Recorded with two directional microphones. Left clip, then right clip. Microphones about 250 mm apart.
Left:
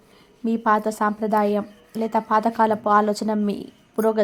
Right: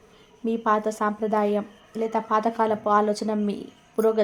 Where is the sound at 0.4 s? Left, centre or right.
Centre.